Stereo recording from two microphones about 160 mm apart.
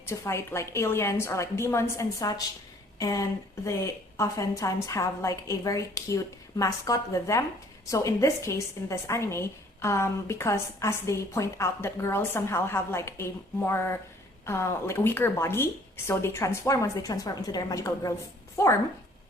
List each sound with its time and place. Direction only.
0.0 s a woman's voice: 15° left (ahead or behind)